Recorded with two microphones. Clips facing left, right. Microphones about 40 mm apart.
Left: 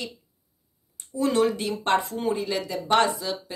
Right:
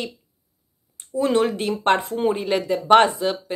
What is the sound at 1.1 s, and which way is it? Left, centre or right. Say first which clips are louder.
Speech: right 3 dB; right.